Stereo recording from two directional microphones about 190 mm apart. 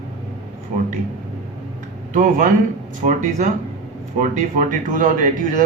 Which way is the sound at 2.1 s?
45° right (ahead or behind).